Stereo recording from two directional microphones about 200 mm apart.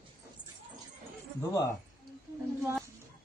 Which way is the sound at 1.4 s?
15° left (ahead or behind).